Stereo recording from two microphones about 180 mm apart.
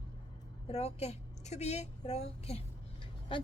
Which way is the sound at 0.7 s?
35° left (ahead or behind).